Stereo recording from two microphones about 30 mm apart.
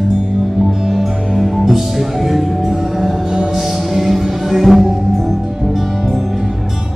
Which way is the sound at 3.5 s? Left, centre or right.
Centre.